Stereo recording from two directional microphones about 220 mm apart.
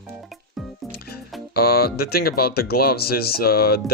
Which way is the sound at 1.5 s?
45° left (ahead or behind).